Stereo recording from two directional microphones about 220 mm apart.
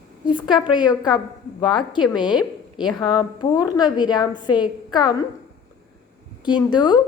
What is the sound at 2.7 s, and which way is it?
A woman's voice, 20° left (ahead or behind).